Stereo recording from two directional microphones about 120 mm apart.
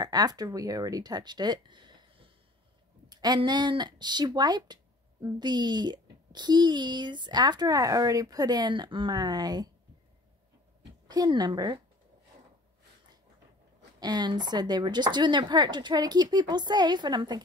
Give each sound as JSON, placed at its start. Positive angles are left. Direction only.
{"t": 0.0, "sound": "speech", "side_deg": -35}
{"t": 3.1, "sound": "a sound", "side_deg": -35}
{"t": 3.4, "sound": "a child's voice", "side_deg": -35}
{"t": 11.1, "sound": "a child's voice", "side_deg": -35}
{"t": 13.9, "sound": "a child's voice", "side_deg": -35}